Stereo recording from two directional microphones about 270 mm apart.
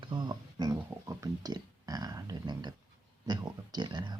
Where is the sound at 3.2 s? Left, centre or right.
Centre.